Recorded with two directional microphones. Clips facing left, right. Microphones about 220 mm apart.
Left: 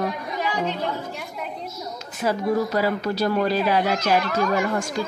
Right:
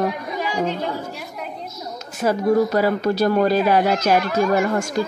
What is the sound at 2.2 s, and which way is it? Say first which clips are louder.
Speech: right 5 dB; 50° right (ahead or behind).